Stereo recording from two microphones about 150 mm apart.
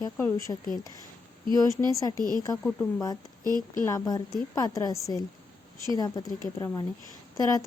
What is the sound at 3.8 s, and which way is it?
Speech, 20° left (ahead or behind).